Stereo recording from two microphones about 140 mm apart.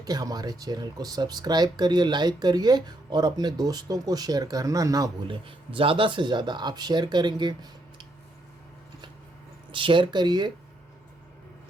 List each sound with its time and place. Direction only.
0.0 s speech: 25° right (ahead or behind)
5.3 s speech: 40° right (ahead or behind)
9.7 s speech: 35° right (ahead or behind)